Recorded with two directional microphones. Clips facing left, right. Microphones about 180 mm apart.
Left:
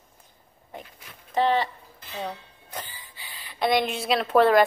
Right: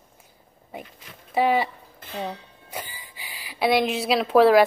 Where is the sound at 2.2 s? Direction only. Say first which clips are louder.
Right 1 dB; 10° right (ahead or behind).